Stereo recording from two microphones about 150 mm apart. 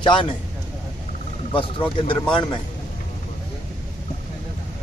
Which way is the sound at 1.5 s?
35° left (ahead or behind).